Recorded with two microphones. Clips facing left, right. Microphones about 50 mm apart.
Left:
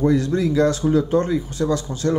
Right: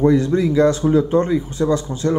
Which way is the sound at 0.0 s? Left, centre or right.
Right.